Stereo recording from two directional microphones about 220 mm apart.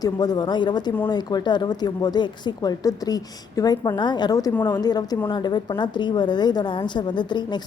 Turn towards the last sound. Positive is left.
turn(degrees=20)  # may be behind; listen again after turning